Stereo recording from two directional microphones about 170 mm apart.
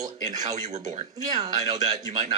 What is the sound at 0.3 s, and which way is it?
Speech, 45° right (ahead or behind).